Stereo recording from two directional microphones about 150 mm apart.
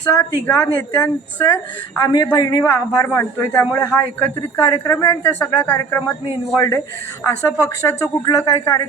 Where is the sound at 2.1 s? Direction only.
25° left (ahead or behind).